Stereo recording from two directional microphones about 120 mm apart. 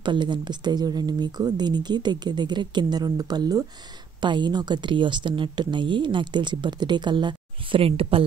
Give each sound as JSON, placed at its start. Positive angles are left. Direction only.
{"t": 0.0, "sound": "speech", "side_deg": -40}
{"t": 7.8, "sound": "speech", "side_deg": -50}